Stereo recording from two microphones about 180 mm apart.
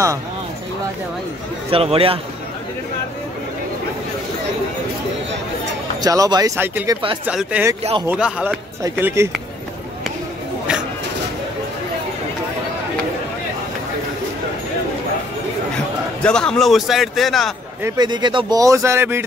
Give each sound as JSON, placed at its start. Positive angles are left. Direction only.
{"t": 1.7, "sound": "a man's voice", "side_deg": -30}
{"t": 5.9, "sound": "a man's voice", "side_deg": -20}
{"t": 16.2, "sound": "a man's voice", "side_deg": 5}
{"t": 17.8, "sound": "speech", "side_deg": -25}